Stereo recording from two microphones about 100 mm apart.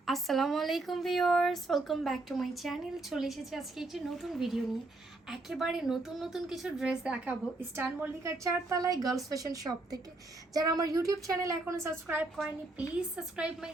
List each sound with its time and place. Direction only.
0.0 s speech: centre (ahead or behind)
7.8 s a woman's voice: 25° right (ahead or behind)
12.0 s a woman's voice: 15° right (ahead or behind)